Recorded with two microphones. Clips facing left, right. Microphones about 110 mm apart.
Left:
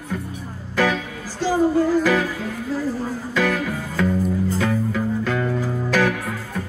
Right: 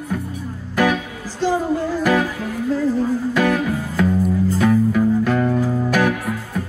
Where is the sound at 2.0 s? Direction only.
15° right (ahead or behind).